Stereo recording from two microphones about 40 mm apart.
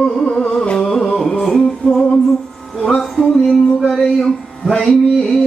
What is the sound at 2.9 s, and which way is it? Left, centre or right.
Music, left.